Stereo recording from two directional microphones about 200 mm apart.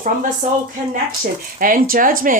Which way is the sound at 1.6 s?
45° right (ahead or behind).